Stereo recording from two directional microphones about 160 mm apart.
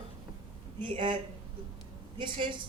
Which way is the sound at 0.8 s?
30° right (ahead or behind).